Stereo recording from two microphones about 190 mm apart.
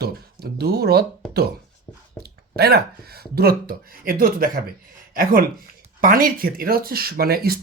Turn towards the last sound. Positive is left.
turn(degrees=-55)  # may be behind; listen again after turning